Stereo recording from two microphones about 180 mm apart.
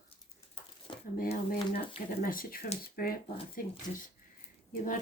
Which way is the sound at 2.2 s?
50° left (ahead or behind).